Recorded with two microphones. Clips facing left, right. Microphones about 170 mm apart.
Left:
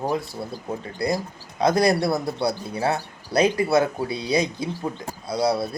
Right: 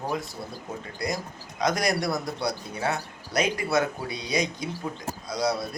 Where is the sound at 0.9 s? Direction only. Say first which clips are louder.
Left 6 dB; 30° left (ahead or behind).